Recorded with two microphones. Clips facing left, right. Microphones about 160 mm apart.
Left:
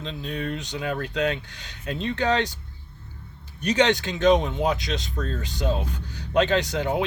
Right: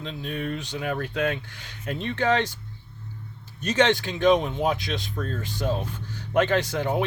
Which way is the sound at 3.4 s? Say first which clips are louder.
Left 1 dB; 15° left (ahead or behind).